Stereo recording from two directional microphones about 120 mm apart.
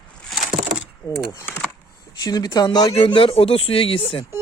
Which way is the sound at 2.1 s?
35° left (ahead or behind).